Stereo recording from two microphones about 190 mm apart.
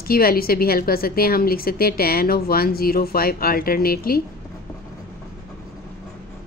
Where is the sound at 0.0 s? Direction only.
50° left (ahead or behind).